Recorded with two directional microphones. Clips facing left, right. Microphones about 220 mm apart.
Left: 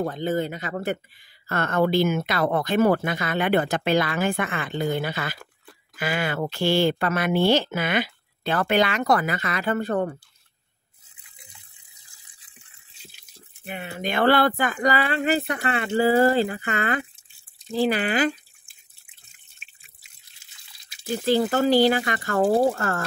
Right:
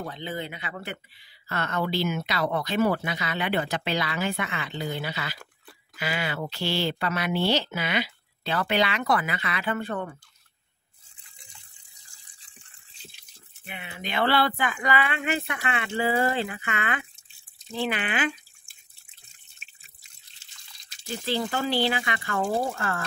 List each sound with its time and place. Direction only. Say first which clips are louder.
0.0 s speech: left 9 dB; 45° left (ahead or behind)
11.3 s water: left 2 dB; 5° left (ahead or behind)
13.7 s speech: left 7 dB; 40° left (ahead or behind)
20.9 s a sound: left 2 dB; 10° left (ahead or behind)
21.3 s speech: left 8 dB; 45° left (ahead or behind)